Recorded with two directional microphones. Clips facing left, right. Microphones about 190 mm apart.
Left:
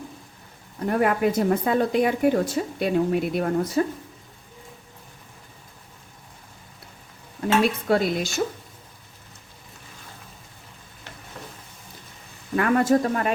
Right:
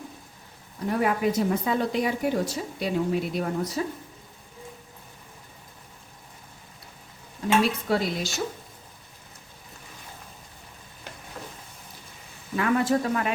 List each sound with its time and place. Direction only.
0.9 s a woman's voice: 55° left (ahead or behind)
7.4 s speech: 55° left (ahead or behind)
12.5 s speech: 50° left (ahead or behind)